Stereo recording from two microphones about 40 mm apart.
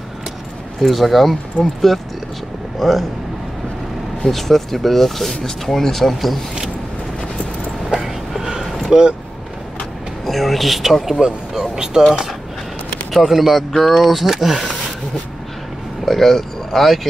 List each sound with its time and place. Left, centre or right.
0.7 s speech: centre
4.2 s speech: centre
7.9 s dog: centre
8.9 s speech: centre
10.2 s speech: centre
11.1 s speech: centre
13.1 s speech: centre
16.1 s speech: centre